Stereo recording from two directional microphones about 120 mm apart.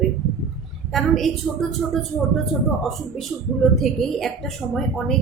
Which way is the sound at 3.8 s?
Centre (ahead or behind).